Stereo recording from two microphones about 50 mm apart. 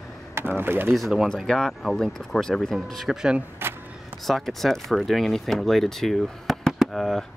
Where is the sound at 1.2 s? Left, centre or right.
Centre.